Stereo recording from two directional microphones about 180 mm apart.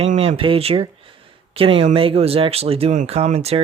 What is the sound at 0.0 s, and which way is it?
Speech, 35° right (ahead or behind).